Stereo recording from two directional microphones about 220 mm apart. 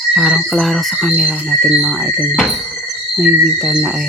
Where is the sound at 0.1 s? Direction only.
Centre (ahead or behind).